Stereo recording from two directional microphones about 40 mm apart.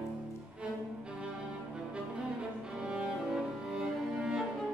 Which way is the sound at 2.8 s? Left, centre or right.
Centre.